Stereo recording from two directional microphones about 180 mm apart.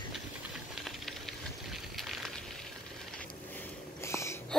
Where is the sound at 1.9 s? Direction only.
Centre (ahead or behind).